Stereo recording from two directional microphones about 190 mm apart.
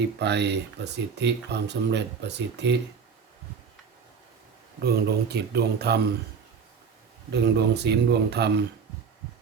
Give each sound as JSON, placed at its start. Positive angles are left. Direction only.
{"t": 0.2, "sound": "speech", "side_deg": -60}
{"t": 4.8, "sound": "speech", "side_deg": -60}
{"t": 7.3, "sound": "speech", "side_deg": -60}